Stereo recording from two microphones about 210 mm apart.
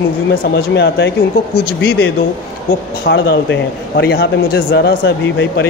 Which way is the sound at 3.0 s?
55° left (ahead or behind).